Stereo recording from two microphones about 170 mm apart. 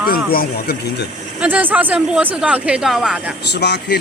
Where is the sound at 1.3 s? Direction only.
10° right (ahead or behind).